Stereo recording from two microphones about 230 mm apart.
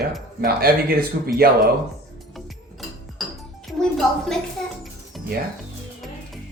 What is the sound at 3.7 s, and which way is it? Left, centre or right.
Music, centre.